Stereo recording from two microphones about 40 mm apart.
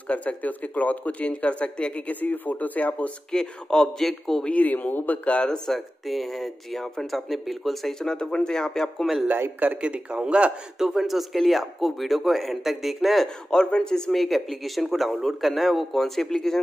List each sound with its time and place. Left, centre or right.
0.1 s speech: left
2.0 s speech: left
3.3 s speech: centre
4.5 s speech: left
5.7 s speech: centre
8.0 s speech: centre
9.0 s speech: centre
9.8 s speech: right
10.8 s speech: centre
13.5 s a man's voice: left
14.1 s speech: centre